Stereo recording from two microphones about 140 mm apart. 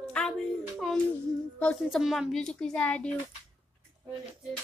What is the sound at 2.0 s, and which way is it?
Speech, centre (ahead or behind).